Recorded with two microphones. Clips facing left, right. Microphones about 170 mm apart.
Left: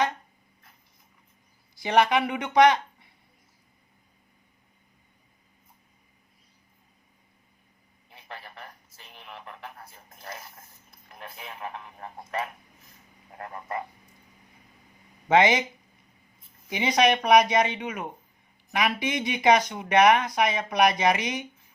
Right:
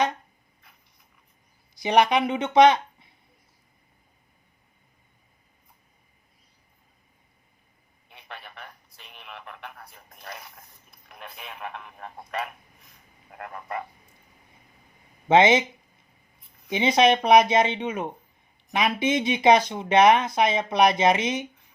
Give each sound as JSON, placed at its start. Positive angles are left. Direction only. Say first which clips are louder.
{"t": 1.7, "sound": "speech", "louder": "right 2 dB", "side_deg": -20}
{"t": 11.9, "sound": "speech", "louder": "even", "side_deg": 15}
{"t": 15.3, "sound": "speech", "louder": "right 3 dB", "side_deg": -25}
{"t": 16.6, "sound": "speech", "louder": "right 3 dB", "side_deg": -25}